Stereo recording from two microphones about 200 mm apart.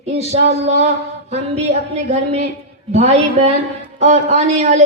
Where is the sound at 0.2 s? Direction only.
35° right (ahead or behind).